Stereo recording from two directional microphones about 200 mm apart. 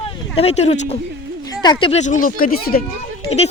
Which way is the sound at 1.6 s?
25° left (ahead or behind).